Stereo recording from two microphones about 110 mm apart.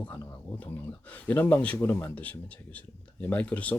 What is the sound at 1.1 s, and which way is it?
A man's voice, 15° left (ahead or behind).